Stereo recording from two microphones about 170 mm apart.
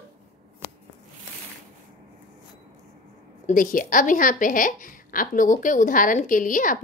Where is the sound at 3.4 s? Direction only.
50° left (ahead or behind).